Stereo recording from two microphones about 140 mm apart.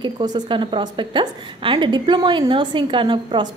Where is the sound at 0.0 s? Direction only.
30° right (ahead or behind).